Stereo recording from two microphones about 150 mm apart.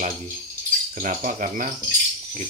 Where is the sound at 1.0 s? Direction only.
55° right (ahead or behind).